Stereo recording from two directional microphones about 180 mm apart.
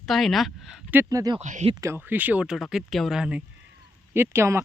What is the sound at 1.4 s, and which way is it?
Speech, 40° right (ahead or behind).